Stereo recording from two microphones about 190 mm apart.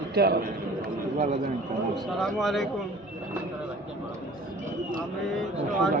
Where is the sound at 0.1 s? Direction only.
55° right (ahead or behind).